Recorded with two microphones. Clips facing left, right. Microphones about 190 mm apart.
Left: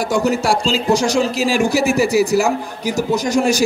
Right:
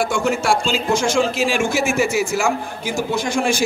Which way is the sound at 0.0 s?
40° left (ahead or behind).